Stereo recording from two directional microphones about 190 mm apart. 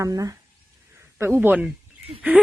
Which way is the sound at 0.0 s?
20° right (ahead or behind).